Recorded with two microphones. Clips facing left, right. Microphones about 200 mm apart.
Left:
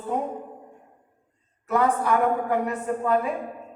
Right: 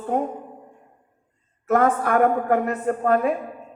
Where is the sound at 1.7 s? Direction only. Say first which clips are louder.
Right 3 dB; 55° right (ahead or behind).